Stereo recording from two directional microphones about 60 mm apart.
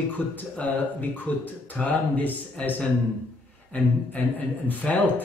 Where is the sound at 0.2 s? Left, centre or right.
Left.